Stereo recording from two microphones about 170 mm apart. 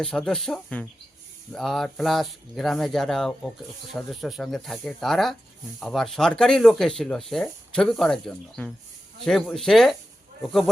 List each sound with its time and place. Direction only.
0.0 s speech: 5° left (ahead or behind)